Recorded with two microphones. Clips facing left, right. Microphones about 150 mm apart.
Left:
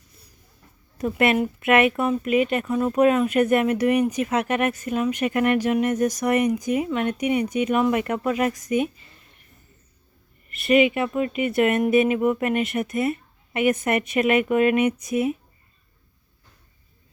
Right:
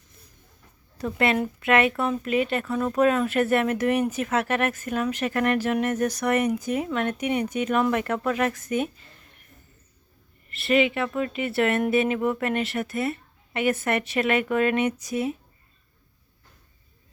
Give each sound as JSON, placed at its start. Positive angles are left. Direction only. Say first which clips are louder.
{"t": 0.9, "sound": "speech", "louder": "left 3 dB", "side_deg": 20}
{"t": 10.7, "sound": "speech", "louder": "left 3 dB", "side_deg": 15}